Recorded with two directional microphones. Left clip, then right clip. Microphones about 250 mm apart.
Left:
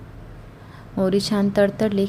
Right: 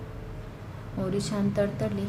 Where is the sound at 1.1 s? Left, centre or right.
Left.